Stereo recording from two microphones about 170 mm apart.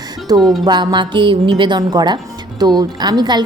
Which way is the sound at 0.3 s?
25° right (ahead or behind).